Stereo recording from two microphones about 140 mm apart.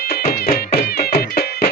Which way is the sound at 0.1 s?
90° left.